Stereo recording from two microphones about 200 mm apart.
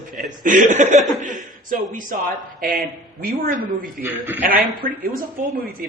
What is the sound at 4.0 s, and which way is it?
Speech, 10° right (ahead or behind).